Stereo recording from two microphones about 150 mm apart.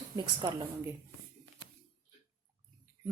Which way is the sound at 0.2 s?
30° right (ahead or behind).